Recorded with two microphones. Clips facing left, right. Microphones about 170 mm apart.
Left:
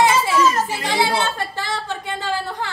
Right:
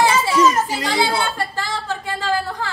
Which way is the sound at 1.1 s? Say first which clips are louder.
Even; 20° left (ahead or behind).